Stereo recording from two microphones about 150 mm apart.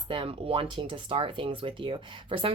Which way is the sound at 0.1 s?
35° right (ahead or behind).